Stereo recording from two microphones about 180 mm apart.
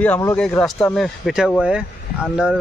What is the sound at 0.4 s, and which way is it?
Speech, 5° left (ahead or behind).